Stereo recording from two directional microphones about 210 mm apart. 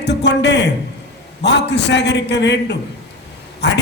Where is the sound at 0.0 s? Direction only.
55° left (ahead or behind).